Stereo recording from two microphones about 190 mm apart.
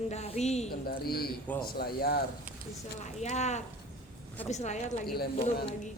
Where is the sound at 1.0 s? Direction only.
55° left (ahead or behind).